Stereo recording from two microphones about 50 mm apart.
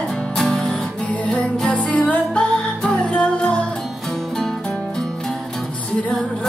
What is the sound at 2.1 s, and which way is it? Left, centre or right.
Music, left.